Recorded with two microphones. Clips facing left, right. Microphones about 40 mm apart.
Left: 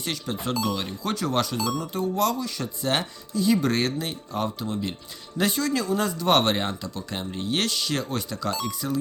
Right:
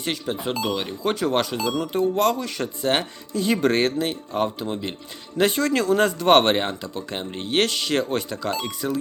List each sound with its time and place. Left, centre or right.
0.0 s speech: right
1.1 s speech: right
1.7 s speech: right
2.8 s speech: right
3.3 s speech: right